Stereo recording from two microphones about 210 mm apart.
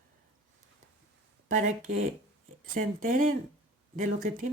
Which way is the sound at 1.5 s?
35° right (ahead or behind).